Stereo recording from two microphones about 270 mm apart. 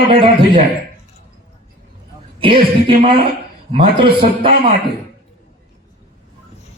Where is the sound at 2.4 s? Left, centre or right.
Centre.